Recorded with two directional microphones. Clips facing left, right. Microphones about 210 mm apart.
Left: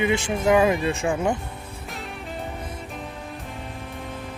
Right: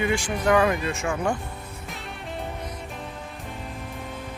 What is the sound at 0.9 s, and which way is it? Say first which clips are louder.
Speech: left 3 dB; 30° left (ahead or behind).